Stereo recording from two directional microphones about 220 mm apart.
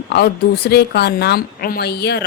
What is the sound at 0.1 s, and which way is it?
A woman's voice, 45° left (ahead or behind).